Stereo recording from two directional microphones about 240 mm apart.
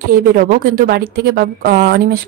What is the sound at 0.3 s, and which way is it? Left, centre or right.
A woman's voice, right.